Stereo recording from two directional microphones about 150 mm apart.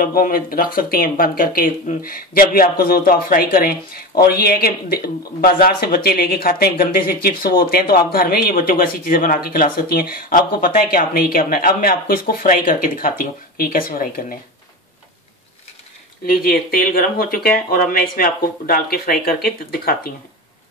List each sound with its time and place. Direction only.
0.0 s speech: 75° left (ahead or behind)
16.3 s speech: 80° left